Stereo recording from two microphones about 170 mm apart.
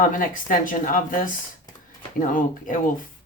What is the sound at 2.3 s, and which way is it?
Speech, 50° left (ahead or behind).